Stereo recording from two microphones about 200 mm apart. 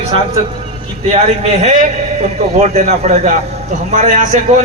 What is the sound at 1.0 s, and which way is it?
A man's voice, 35° right (ahead or behind).